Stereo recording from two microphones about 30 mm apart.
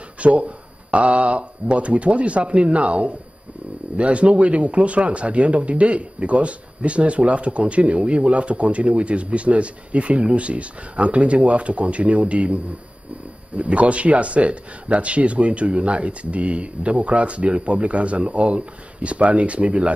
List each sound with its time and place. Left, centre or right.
0.2 s a man's voice: right
13.6 s a man's voice: right